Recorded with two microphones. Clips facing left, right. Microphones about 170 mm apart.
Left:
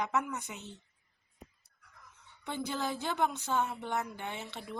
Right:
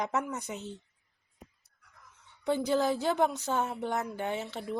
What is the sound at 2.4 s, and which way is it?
Speech, 40° right (ahead or behind).